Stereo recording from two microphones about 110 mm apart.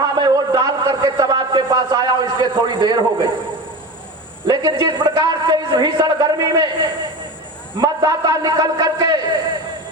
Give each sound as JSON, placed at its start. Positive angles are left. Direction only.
{"t": 0.0, "sound": "a sound", "side_deg": -35}
{"t": 4.4, "sound": "a man's voice", "side_deg": -40}
{"t": 7.8, "sound": "a man's voice", "side_deg": -35}